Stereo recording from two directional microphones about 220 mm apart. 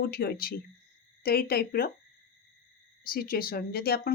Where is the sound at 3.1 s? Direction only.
40° left (ahead or behind).